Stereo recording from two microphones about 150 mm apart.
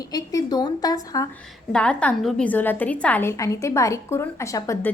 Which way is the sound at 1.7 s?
5° left (ahead or behind).